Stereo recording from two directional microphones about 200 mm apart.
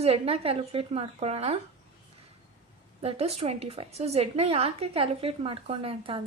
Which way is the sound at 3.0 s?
30° right (ahead or behind).